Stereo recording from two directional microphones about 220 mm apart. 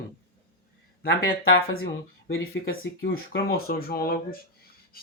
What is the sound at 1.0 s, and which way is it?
Speech, 50° left (ahead or behind).